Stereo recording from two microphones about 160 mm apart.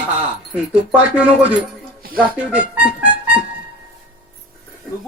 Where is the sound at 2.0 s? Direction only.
65° right (ahead or behind).